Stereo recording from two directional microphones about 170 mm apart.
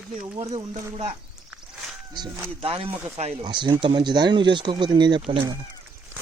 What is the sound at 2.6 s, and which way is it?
Speech, 35° right (ahead or behind).